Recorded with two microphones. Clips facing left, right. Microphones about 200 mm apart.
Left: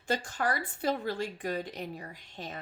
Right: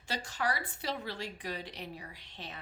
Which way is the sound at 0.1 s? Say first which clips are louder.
Left 4 dB; 50° left (ahead or behind).